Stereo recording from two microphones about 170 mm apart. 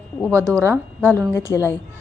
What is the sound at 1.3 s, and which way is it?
Speech, 15° left (ahead or behind).